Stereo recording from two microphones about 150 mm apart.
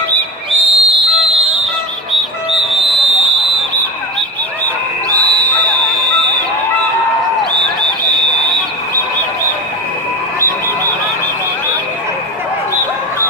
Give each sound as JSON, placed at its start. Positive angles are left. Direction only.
{"t": 0.5, "sound": "whistle", "side_deg": -40}
{"t": 5.1, "sound": "music", "side_deg": -30}